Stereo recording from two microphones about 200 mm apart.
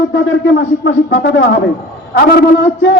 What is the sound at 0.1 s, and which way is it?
Speech, 65° left (ahead or behind).